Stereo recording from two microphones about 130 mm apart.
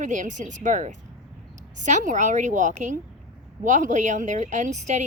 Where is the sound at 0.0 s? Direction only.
75° right (ahead or behind).